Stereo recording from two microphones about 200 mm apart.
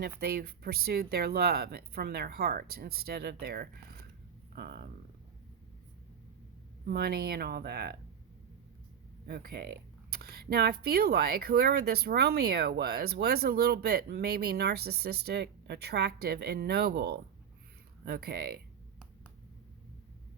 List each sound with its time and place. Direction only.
0.0 s speech: 50° right (ahead or behind)
6.8 s speech: 50° right (ahead or behind)
9.2 s speech: 50° right (ahead or behind)